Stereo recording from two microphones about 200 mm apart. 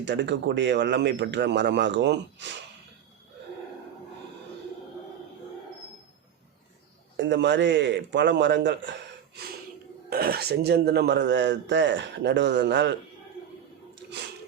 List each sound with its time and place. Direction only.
0.0 s speech: 60° right (ahead or behind)
7.2 s speech: 60° right (ahead or behind)
10.1 s speech: 50° right (ahead or behind)